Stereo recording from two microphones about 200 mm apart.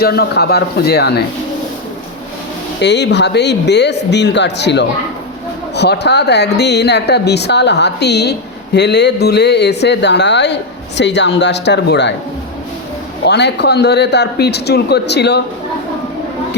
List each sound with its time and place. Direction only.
0.0 s speech: 55° left (ahead or behind)
2.8 s speech: 60° left (ahead or behind)
13.2 s speech: 55° left (ahead or behind)